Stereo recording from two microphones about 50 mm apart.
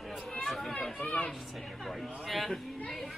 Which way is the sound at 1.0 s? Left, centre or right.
Left.